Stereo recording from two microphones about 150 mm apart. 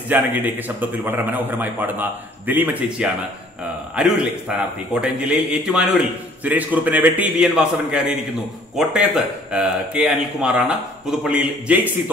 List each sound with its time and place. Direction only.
0.1 s speech: 10° right (ahead or behind)